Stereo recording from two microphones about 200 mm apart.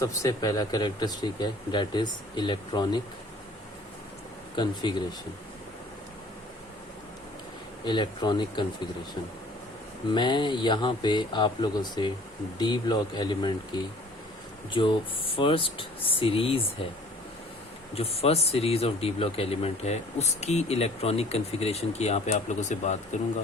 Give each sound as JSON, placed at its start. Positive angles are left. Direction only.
{"t": 0.0, "sound": "speech", "side_deg": 15}
{"t": 4.5, "sound": "speech", "side_deg": 20}
{"t": 7.9, "sound": "speech", "side_deg": 25}
{"t": 10.1, "sound": "speech", "side_deg": 25}
{"t": 17.9, "sound": "speech", "side_deg": 30}